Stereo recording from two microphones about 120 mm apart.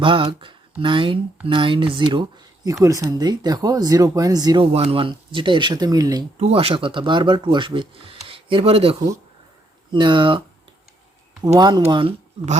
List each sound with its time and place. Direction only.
0.0 s speech: 45° right (ahead or behind)
2.8 s speech: 30° right (ahead or behind)
4.6 s speech: 55° right (ahead or behind); by 6.2 s 30° right (ahead or behind)
6.3 s speech: 55° right (ahead or behind)
11.4 s speech: 35° right (ahead or behind)